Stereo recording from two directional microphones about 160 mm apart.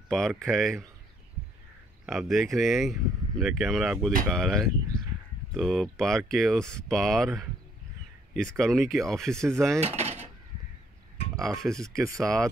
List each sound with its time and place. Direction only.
0.4 s speech: centre (ahead or behind)
2.0 s speech: centre (ahead or behind)
8.5 s speech: 5° left (ahead or behind)
9.8 s dishes: 45° right (ahead or behind)
11.3 s speech: centre (ahead or behind)
12.0 s speech: 20° right (ahead or behind)